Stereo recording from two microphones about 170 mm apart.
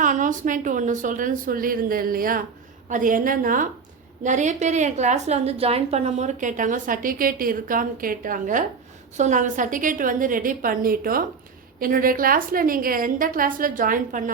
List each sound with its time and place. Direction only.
0.0 s a woman's voice: 50° right (ahead or behind)